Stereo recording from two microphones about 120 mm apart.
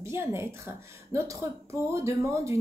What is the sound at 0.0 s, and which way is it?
Speech, 20° right (ahead or behind).